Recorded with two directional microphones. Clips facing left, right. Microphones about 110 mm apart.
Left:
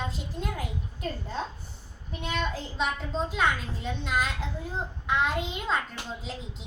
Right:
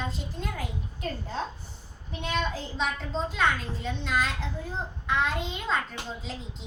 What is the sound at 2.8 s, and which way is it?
A child's voice, 5° left (ahead or behind).